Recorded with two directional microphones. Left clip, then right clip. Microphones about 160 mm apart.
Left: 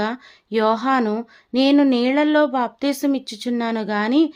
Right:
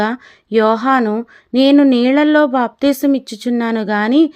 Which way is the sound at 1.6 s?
30° right (ahead or behind).